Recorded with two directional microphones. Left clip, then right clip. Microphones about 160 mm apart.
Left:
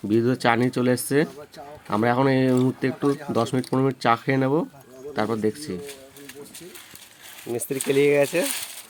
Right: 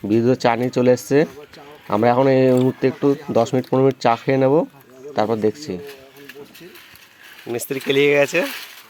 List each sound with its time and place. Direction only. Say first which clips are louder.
0.1 s speech: right 4 dB; 20° right (ahead or behind)
7.7 s speech: right 3 dB; centre (ahead or behind)